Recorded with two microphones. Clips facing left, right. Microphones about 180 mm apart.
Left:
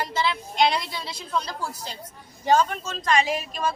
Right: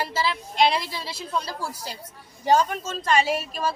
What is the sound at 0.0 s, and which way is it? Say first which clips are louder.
A woman's voice: even; 5° right (ahead or behind).